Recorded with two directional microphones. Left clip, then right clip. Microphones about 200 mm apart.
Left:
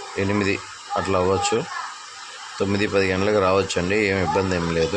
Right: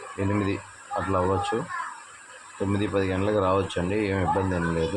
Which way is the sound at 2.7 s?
15° left (ahead or behind).